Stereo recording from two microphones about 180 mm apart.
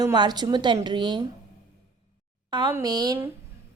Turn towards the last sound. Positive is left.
turn(degrees=-15)  # may be behind; listen again after turning